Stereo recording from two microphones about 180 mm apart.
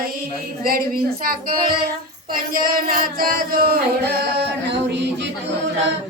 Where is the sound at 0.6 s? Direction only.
55° right (ahead or behind); by 5.3 s 75° right (ahead or behind).